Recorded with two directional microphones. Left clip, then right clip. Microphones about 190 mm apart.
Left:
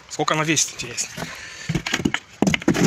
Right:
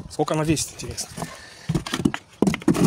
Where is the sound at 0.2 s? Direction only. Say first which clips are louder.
Left 3 dB; 35° right (ahead or behind).